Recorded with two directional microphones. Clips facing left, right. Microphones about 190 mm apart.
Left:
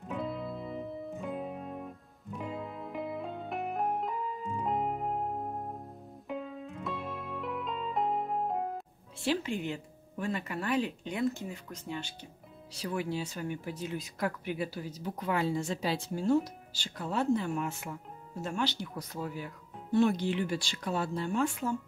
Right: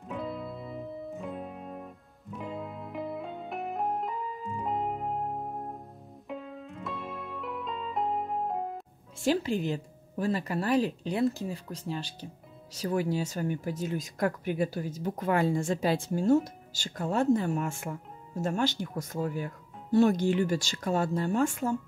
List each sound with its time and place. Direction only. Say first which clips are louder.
0.1 s music: even; centre (ahead or behind)
9.2 s speech: right 4 dB; 40° right (ahead or behind)